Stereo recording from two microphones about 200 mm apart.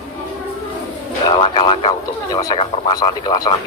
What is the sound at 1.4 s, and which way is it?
A man's voice, 25° left (ahead or behind).